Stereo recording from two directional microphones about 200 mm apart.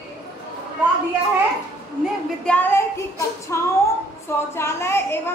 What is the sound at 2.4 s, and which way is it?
A woman's voice, 5° left (ahead or behind).